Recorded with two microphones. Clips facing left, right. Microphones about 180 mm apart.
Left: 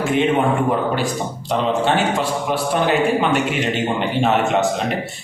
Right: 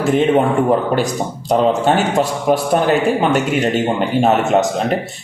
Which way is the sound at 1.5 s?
45° right (ahead or behind).